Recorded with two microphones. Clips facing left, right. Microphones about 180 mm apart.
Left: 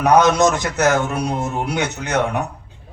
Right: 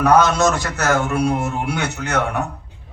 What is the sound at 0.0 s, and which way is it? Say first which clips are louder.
A man's voice: left 1 dB; 20° left (ahead or behind).